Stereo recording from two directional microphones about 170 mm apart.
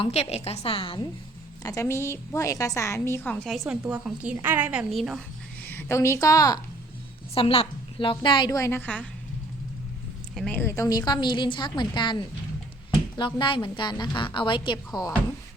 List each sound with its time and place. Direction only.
0.0 s a woman's voice: 35° left (ahead or behind)
1.6 s a woman's voice: 20° left (ahead or behind)
3.7 s a woman's voice: 5° right (ahead or behind)
5.6 s a woman's voice: 15° left (ahead or behind)
7.3 s a woman's voice: 35° left (ahead or behind); by 9.0 s 10° left (ahead or behind)
10.3 s a woman's voice: 5° left (ahead or behind); by 12.1 s 25° left (ahead or behind)
13.1 s a woman's voice: 30° left (ahead or behind)